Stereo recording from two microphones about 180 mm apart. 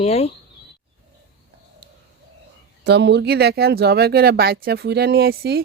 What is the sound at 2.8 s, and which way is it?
Speech, 70° right (ahead or behind).